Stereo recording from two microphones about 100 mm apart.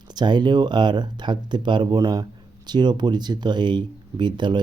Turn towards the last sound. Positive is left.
turn(degrees=-50)  # may be behind; listen again after turning